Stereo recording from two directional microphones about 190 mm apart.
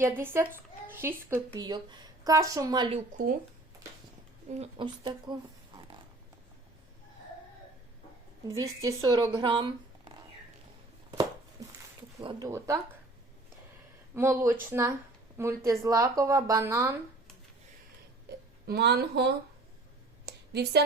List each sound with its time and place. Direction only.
0.0 s speech: 15° right (ahead or behind)
0.9 s a sound: 10° right (ahead or behind)
1.3 s a woman's voice: 20° right (ahead or behind)
4.6 s a woman's voice: 25° right (ahead or behind)
8.4 s a woman's voice: 15° right (ahead or behind)
11.6 s dog: 20° right (ahead or behind)
12.2 s speech: 25° right (ahead or behind)
14.2 s speech: 15° right (ahead or behind)
18.6 s a woman's voice: 55° right (ahead or behind)
20.2 s a sound: 60° right (ahead or behind)